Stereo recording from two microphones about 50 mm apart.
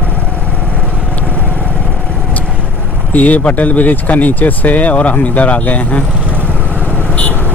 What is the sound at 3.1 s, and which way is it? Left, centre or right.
Speech, left.